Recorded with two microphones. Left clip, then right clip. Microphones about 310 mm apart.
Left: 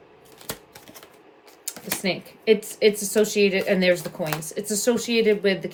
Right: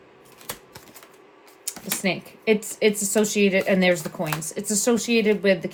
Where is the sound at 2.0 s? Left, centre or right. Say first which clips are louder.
Right 1 dB; centre.